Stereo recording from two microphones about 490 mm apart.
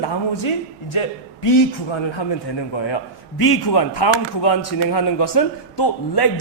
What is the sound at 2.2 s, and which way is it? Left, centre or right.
Speech, left.